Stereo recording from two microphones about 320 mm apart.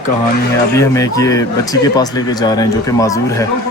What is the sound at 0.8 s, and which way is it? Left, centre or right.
A man's voice, centre.